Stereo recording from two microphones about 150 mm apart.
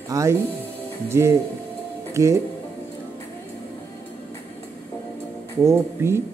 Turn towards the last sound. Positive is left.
turn(degrees=-15)  # may be behind; listen again after turning